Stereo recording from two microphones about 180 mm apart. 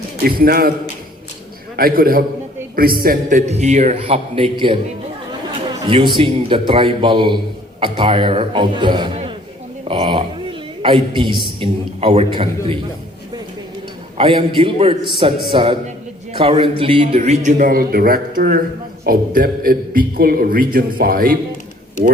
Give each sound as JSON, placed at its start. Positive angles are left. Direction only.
{"t": 0.3, "sound": "a man's voice", "side_deg": -55}
{"t": 1.7, "sound": "a man's voice", "side_deg": -55}
{"t": 5.8, "sound": "a man's voice", "side_deg": -30}
{"t": 14.2, "sound": "a man's voice", "side_deg": -30}